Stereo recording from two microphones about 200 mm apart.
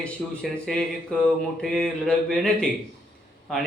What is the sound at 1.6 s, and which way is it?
A man's voice, 5° left (ahead or behind).